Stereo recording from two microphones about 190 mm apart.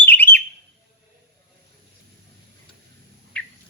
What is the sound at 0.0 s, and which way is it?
Bird, 10° left (ahead or behind).